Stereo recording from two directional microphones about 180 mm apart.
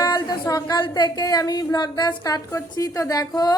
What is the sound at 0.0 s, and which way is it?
A woman's voice, 25° left (ahead or behind).